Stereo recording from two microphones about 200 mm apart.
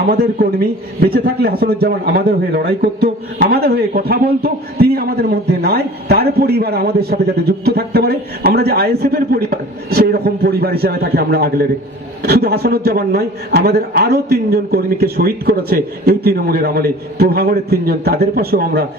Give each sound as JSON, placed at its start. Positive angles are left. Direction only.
{"t": 0.1, "sound": "a man's voice", "side_deg": -50}